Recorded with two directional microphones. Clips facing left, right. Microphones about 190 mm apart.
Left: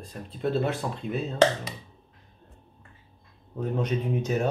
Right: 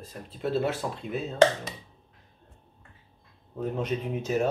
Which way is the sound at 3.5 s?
Centre (ahead or behind).